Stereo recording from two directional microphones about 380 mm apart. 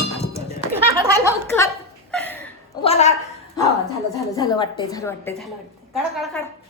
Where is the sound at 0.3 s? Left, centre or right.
Centre.